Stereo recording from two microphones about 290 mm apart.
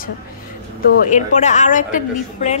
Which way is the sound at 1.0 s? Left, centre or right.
Left.